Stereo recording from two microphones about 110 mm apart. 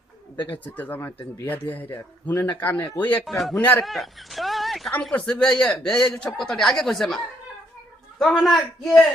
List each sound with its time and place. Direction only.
0.3 s speech: 15° left (ahead or behind)
3.2 s speech: centre (ahead or behind)
3.6 s speech: 15° left (ahead or behind)
3.8 s speech: centre (ahead or behind)
8.2 s speech: centre (ahead or behind)